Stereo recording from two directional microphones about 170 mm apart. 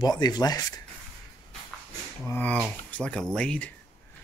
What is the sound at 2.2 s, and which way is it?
Speech, 10° left (ahead or behind).